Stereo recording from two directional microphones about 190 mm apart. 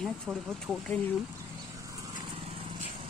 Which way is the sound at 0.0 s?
Centre (ahead or behind).